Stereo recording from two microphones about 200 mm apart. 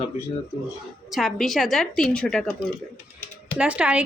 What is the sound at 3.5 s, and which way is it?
Speech, 5° right (ahead or behind).